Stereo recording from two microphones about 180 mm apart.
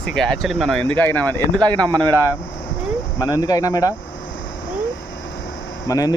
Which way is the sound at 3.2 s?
20° left (ahead or behind).